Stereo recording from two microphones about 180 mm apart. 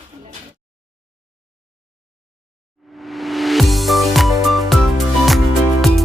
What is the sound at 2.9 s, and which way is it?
Music, centre (ahead or behind).